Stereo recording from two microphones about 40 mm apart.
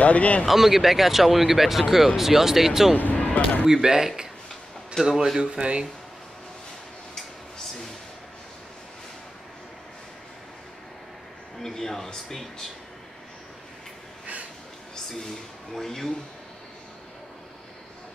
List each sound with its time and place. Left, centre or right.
0.0 s speech: left
0.5 s speech: centre
3.2 s music: left
3.6 s speech: centre
5.4 s speech: right
11.6 s speech: centre
15.7 s speech: centre